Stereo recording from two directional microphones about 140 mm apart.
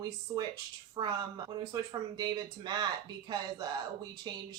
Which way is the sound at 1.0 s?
40° right (ahead or behind).